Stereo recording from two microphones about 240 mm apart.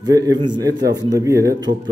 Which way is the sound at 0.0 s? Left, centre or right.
Centre.